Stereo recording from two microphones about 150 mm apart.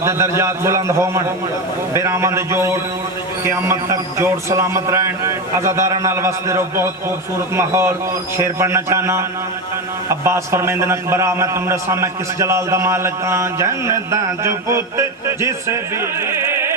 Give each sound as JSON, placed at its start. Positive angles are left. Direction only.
{"t": 0.0, "sound": "a man's voice", "side_deg": -20}